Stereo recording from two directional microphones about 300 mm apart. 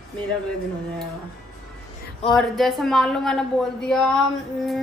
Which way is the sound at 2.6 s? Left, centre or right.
Centre.